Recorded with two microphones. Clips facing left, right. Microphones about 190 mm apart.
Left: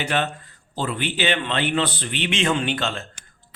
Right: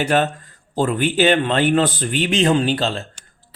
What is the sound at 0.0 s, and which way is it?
A man's voice, 45° right (ahead or behind).